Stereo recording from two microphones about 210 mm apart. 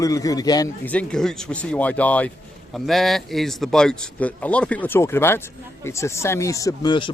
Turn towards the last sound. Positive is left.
turn(degrees=20)  # may be behind; listen again after turning